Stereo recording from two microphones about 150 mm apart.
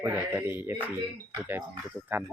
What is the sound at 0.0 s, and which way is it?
Speech, 15° right (ahead or behind).